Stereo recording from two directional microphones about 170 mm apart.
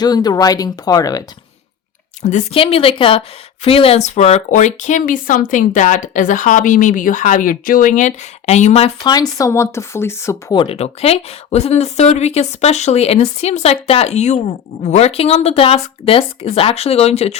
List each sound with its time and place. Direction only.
0.0 s speech: 25° left (ahead or behind)
2.2 s a woman's voice: 35° left (ahead or behind)
9.0 s speech: 20° left (ahead or behind)
10.6 s speech: 35° left (ahead or behind)